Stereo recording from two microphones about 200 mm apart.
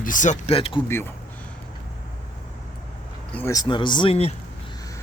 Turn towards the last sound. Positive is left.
turn(degrees=30)  # may be behind; listen again after turning